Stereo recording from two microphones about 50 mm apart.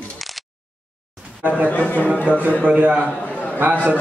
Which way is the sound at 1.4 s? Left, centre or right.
Right.